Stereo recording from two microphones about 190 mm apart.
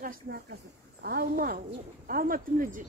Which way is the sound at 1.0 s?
55° right (ahead or behind).